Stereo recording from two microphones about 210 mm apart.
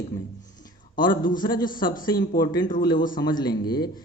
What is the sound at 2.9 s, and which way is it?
Speech, 40° left (ahead or behind).